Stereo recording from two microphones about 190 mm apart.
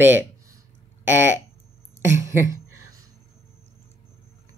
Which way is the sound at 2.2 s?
15° right (ahead or behind).